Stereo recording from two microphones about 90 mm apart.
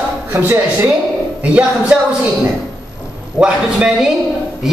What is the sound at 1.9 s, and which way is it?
Speech, 10° right (ahead or behind).